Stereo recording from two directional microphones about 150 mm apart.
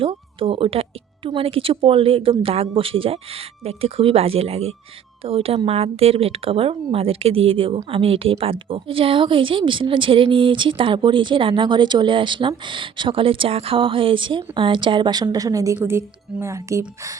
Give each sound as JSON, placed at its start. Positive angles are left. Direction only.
{"t": 0.0, "sound": "speech", "side_deg": -35}